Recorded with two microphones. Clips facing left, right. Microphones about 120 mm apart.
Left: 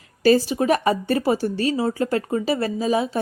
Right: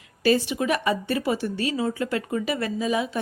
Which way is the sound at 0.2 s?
40° left (ahead or behind).